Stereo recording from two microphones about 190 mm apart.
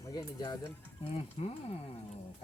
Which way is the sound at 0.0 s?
20° left (ahead or behind).